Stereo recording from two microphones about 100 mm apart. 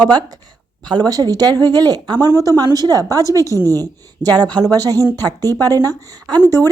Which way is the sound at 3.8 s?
40° right (ahead or behind).